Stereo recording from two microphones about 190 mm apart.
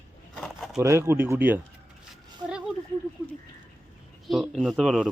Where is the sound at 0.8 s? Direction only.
15° right (ahead or behind).